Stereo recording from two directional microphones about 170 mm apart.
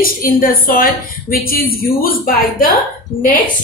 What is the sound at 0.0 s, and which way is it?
A woman's voice, 55° left (ahead or behind).